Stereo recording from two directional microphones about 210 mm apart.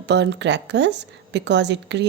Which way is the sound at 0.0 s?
55° right (ahead or behind).